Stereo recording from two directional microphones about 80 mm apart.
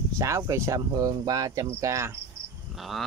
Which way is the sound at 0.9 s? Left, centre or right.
Right.